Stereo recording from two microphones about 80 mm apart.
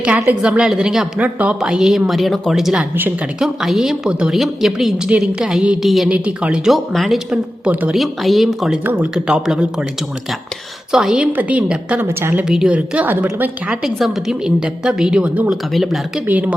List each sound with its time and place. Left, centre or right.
0.4 s a woman's voice: centre
6.1 s a woman's voice: centre
6.7 s speech: centre
7.7 s a woman's voice: right
7.9 s speech: centre
8.8 s a woman's voice: right
9.1 s a woman's voice: centre
10.9 s a woman's voice: centre
11.3 s a woman's voice: right
12.0 s a woman's voice: right
12.5 s a woman's voice: centre
13.8 s a woman's voice: centre
16.2 s a woman's voice: right